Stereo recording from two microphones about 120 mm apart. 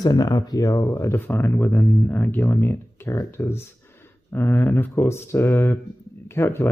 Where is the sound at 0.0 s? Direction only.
30° left (ahead or behind).